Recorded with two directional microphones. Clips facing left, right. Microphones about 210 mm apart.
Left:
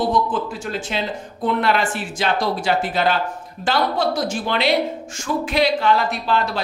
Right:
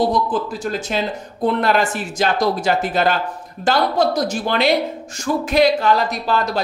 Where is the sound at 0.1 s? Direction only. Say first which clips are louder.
Right 1 dB; 40° right (ahead or behind).